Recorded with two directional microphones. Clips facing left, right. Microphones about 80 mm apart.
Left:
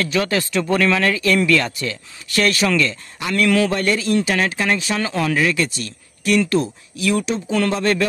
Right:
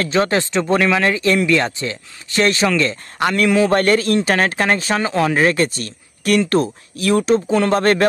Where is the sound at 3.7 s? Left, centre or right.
Right.